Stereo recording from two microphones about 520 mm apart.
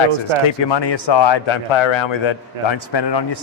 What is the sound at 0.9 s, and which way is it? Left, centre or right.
A man's voice, left.